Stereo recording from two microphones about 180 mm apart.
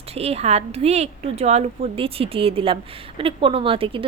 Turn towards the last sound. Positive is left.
turn(degrees=-30)  # may be behind; listen again after turning